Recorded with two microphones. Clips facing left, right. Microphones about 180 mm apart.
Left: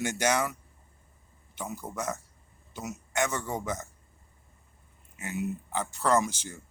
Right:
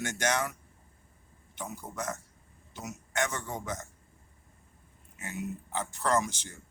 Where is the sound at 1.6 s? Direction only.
10° left (ahead or behind).